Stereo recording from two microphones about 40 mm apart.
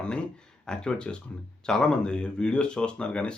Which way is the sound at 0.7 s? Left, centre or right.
Left.